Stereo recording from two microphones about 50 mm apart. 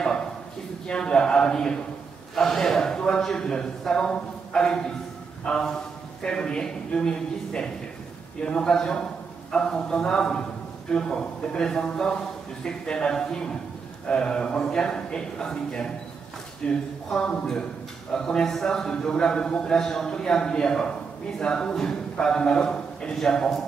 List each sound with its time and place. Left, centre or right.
0.8 s a man's voice: centre